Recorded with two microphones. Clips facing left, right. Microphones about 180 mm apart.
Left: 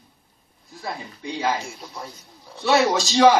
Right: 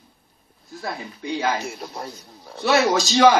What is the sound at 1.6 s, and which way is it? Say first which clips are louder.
Speech: right 4 dB; 70° right (ahead or behind).